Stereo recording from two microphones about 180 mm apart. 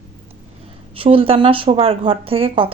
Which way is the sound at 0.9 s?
30° right (ahead or behind).